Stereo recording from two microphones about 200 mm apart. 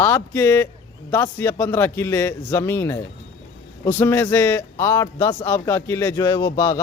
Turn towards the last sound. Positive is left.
turn(degrees=20)  # may be behind; listen again after turning